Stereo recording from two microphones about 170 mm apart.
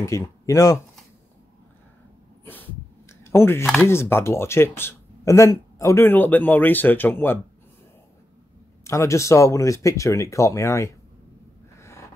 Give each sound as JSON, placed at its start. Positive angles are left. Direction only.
{"t": 0.0, "sound": "speech", "side_deg": 20}
{"t": 3.1, "sound": "a sound", "side_deg": 15}
{"t": 3.8, "sound": "speech", "side_deg": 15}
{"t": 8.8, "sound": "speech", "side_deg": 15}